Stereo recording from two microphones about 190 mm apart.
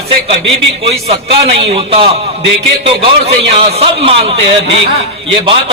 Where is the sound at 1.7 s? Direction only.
30° right (ahead or behind).